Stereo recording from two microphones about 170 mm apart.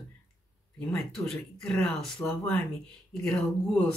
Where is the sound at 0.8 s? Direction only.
5° left (ahead or behind).